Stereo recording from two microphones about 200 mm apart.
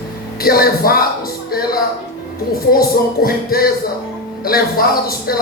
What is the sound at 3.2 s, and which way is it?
Speech, 50° left (ahead or behind).